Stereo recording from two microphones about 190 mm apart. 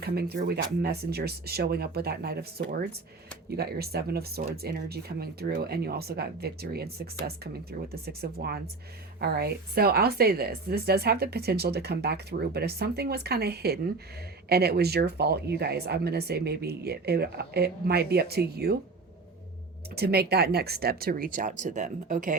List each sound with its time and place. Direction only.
0.0 s speech: 55° right (ahead or behind)
20.0 s speech: 55° right (ahead or behind)